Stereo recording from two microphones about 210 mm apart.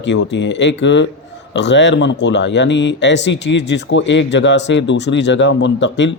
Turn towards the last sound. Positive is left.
turn(degrees=60)  # may be behind; listen again after turning